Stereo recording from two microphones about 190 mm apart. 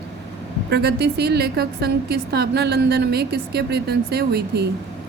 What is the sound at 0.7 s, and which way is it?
A woman's voice, 60° right (ahead or behind).